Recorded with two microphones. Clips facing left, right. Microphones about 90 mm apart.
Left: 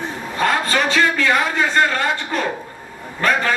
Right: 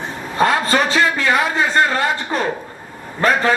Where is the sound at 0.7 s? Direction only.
35° right (ahead or behind).